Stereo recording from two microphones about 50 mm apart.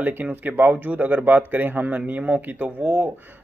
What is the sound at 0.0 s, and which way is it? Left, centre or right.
Speech, right.